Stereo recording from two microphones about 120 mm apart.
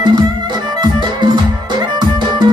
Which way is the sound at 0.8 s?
40° right (ahead or behind).